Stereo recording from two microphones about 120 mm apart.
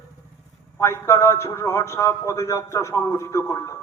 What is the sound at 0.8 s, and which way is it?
A man's voice, 20° left (ahead or behind).